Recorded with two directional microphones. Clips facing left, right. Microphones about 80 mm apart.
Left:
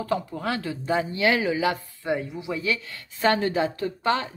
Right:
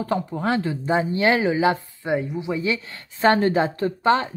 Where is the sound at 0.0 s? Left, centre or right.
Right.